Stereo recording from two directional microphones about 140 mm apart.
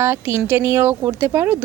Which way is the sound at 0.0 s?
15° right (ahead or behind).